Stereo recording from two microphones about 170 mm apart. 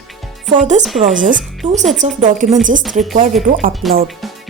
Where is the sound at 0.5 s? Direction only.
45° right (ahead or behind).